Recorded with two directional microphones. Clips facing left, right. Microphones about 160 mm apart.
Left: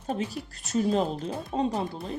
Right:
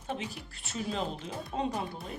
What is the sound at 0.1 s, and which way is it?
Speech, 40° left (ahead or behind).